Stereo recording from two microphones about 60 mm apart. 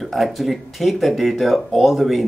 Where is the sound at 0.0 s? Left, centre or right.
Centre.